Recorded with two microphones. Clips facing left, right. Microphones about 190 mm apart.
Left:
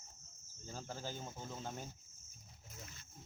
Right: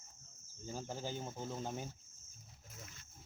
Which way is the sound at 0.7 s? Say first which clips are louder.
Right 3 dB; 15° right (ahead or behind).